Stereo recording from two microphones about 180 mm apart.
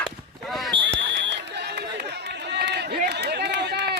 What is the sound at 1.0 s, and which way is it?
Run, 70° right (ahead or behind).